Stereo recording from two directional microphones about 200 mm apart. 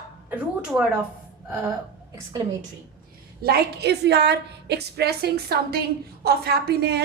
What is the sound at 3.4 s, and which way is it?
A woman's voice, 55° right (ahead or behind).